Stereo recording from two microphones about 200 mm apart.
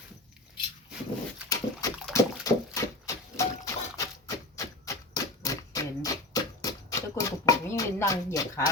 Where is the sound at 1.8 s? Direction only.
15° left (ahead or behind).